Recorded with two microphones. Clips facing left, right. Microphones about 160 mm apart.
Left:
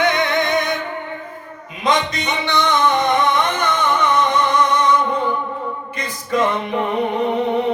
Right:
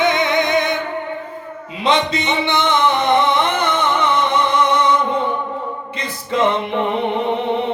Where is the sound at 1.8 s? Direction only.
25° right (ahead or behind).